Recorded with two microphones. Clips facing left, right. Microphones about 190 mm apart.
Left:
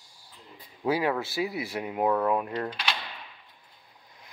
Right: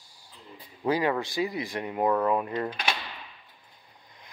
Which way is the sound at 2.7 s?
50° right (ahead or behind).